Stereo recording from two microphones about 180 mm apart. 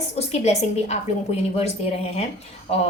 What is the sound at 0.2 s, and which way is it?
A woman's voice, 35° left (ahead or behind).